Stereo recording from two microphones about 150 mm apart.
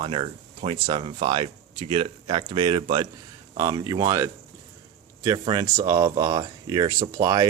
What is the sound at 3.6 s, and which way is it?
Speech, 20° right (ahead or behind).